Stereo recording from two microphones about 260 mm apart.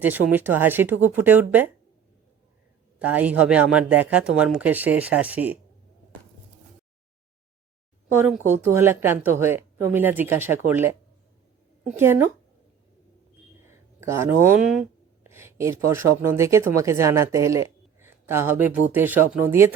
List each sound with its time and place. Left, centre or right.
0.0 s speech: centre
3.0 s speech: centre
8.4 s speech: centre
13.7 s speech: centre